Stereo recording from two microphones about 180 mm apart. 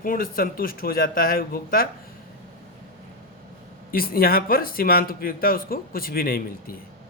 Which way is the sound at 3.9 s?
55° left (ahead or behind).